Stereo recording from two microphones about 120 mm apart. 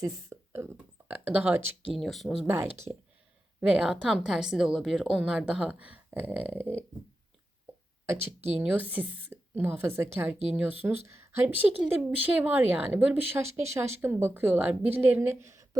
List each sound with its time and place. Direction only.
0.0 s speech: 20° right (ahead or behind)
1.9 s speech: centre (ahead or behind)
3.6 s speech: 5° right (ahead or behind)
8.5 s speech: 15° right (ahead or behind)